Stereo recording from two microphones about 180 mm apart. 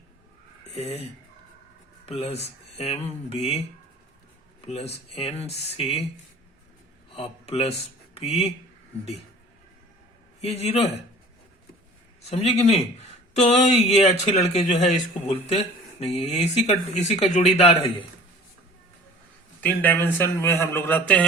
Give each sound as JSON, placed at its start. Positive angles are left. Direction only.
{"t": 0.7, "sound": "speech", "side_deg": 35}
{"t": 7.1, "sound": "speech", "side_deg": 35}
{"t": 10.4, "sound": "speech", "side_deg": 35}
{"t": 12.3, "sound": "speech", "side_deg": 35}
{"t": 19.6, "sound": "a man's voice", "side_deg": 10}